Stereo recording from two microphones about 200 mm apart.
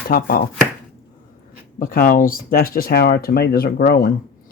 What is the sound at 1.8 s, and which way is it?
Speech, 45° left (ahead or behind).